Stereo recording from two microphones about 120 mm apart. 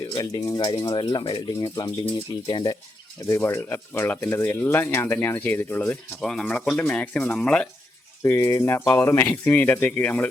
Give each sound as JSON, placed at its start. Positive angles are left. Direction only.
{"t": 0.1, "sound": "speech", "side_deg": 30}
{"t": 1.6, "sound": "speech", "side_deg": 30}
{"t": 3.2, "sound": "speech", "side_deg": 20}
{"t": 6.1, "sound": "speech", "side_deg": 5}
{"t": 8.2, "sound": "speech", "side_deg": 25}